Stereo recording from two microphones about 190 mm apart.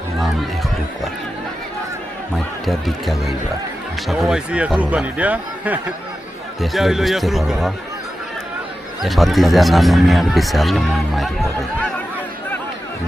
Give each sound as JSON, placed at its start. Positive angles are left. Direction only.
{"t": 2.6, "sound": "speech", "side_deg": 0}
{"t": 9.0, "sound": "speech", "side_deg": 0}